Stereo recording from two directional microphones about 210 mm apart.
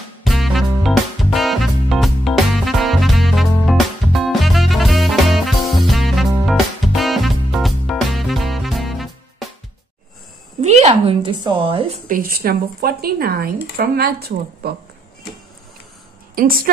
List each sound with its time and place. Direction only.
0.2 s music: centre (ahead or behind)
10.6 s speech: 30° right (ahead or behind)
12.1 s speech: 45° right (ahead or behind)
16.3 s speech: 45° right (ahead or behind)